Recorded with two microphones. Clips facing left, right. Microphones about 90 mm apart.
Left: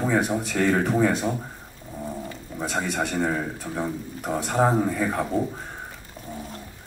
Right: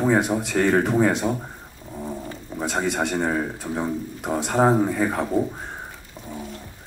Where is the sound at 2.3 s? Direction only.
35° right (ahead or behind).